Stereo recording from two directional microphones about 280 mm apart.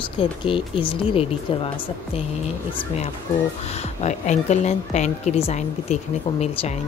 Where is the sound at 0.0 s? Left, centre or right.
Centre.